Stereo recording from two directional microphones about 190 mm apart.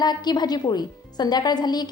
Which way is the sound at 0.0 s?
20° left (ahead or behind).